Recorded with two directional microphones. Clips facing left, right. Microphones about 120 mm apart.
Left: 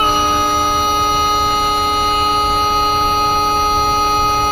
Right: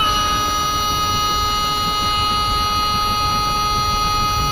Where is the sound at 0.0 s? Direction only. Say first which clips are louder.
Left 5 dB; 40° left (ahead or behind).